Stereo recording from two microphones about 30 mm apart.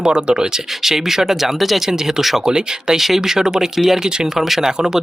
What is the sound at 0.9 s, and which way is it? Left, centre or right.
Speech, centre.